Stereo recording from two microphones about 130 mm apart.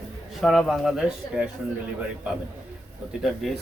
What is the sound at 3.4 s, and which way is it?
Speech, centre (ahead or behind).